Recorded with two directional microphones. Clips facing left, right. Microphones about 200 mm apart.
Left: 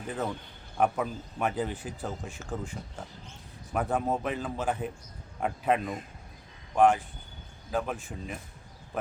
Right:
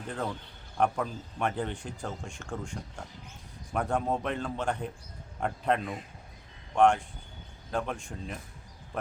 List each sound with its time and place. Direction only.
0.8 s speech: 5° left (ahead or behind)